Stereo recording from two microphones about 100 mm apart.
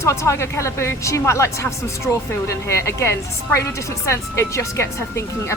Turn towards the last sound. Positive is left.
turn(degrees=25)  # may be behind; listen again after turning